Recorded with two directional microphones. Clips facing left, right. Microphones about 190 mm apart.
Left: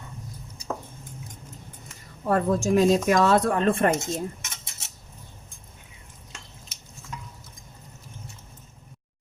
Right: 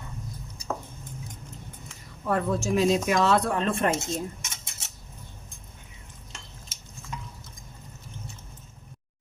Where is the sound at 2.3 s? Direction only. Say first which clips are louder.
Left 4 dB; 45° left (ahead or behind).